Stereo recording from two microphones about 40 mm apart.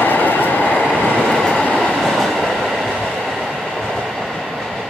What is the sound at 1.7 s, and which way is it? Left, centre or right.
Train, centre.